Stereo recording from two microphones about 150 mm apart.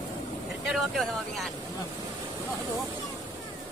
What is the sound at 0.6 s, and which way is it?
Vehicle, centre (ahead or behind).